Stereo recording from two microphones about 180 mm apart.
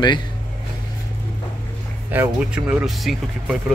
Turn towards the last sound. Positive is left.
turn(degrees=-5)  # may be behind; listen again after turning